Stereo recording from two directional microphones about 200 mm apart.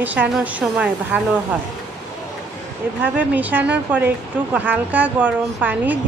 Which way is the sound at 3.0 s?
10° right (ahead or behind).